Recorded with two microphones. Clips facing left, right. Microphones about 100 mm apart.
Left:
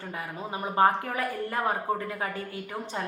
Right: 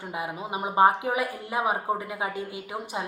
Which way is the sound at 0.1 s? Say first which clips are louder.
Right 4 dB; 15° right (ahead or behind).